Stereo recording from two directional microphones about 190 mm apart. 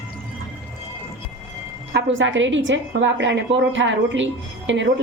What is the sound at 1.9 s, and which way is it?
A woman's voice, 80° right.